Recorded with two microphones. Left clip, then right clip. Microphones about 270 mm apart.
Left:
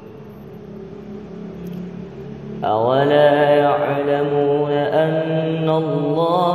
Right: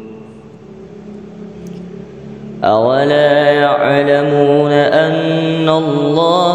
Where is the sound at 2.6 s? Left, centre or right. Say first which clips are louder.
Right 6 dB; right.